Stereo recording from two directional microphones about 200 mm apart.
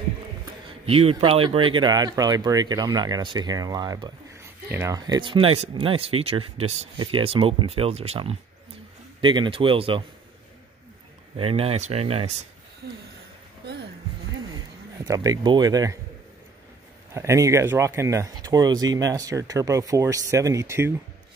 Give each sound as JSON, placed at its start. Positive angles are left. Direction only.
{"t": 0.8, "sound": "speech", "side_deg": -30}
{"t": 11.3, "sound": "speech", "side_deg": -30}
{"t": 15.0, "sound": "speech", "side_deg": -20}
{"t": 17.1, "sound": "speech", "side_deg": -15}